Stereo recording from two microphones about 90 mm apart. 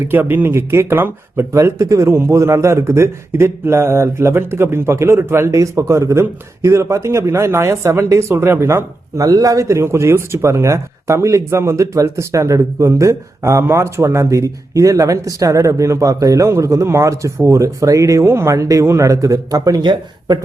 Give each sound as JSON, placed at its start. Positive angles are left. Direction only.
{"t": 0.0, "sound": "speech", "side_deg": -25}
{"t": 1.5, "sound": "a man's voice", "side_deg": -35}